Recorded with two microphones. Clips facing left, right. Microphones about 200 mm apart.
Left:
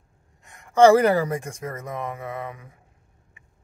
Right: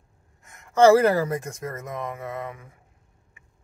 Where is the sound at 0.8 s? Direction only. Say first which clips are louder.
Left 1 dB; 10° left (ahead or behind).